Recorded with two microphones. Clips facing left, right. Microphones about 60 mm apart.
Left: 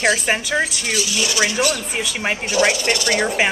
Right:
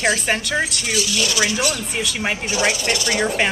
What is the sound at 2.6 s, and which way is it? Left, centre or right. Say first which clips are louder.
Speech: left 4 dB; left.